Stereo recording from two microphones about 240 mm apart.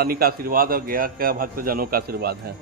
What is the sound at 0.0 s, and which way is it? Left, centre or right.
A man's voice, right.